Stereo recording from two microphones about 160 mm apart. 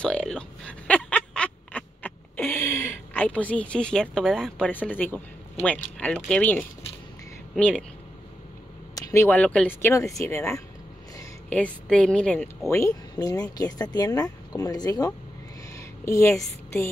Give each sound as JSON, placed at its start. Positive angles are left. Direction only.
{"t": 0.0, "sound": "speech", "side_deg": 5}
{"t": 8.9, "sound": "a woman's voice", "side_deg": 15}
{"t": 11.4, "sound": "a woman's voice", "side_deg": 5}
{"t": 12.6, "sound": "speech", "side_deg": 20}
{"t": 15.7, "sound": "a sound", "side_deg": 20}